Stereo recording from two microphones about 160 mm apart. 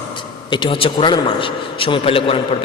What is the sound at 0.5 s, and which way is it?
A man's voice, 30° left (ahead or behind).